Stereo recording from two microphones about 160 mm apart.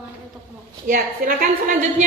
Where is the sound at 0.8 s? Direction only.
60° right (ahead or behind).